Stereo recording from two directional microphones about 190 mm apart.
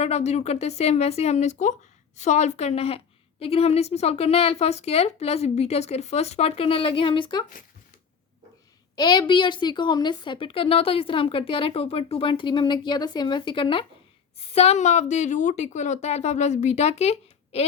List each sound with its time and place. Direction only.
0.0 s a woman's voice: 35° left (ahead or behind)
9.0 s a woman's voice: 20° left (ahead or behind)